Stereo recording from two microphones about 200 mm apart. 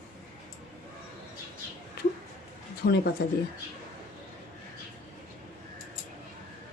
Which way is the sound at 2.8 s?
50° left (ahead or behind).